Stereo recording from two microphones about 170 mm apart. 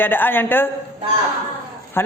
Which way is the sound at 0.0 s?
10° left (ahead or behind).